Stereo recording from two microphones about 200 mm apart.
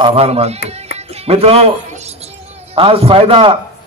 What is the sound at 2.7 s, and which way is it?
Speech, 30° right (ahead or behind).